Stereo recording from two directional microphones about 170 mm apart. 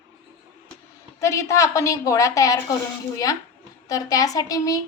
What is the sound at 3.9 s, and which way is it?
Speech, 20° left (ahead or behind).